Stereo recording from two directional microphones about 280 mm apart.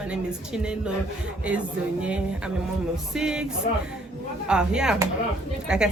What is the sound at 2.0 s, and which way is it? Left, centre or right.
A woman's voice, centre.